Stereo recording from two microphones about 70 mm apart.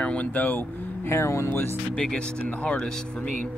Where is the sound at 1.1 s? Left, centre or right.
Left.